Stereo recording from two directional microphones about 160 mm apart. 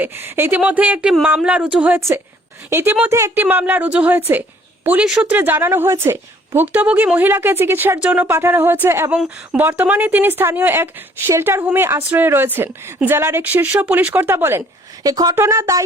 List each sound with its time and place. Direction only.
0.0 s a woman's voice: 15° right (ahead or behind)